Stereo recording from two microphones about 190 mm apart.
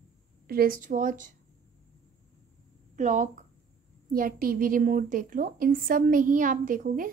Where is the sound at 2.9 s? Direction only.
40° right (ahead or behind).